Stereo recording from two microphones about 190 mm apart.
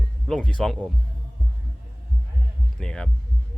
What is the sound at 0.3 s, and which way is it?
Speech, 5° left (ahead or behind).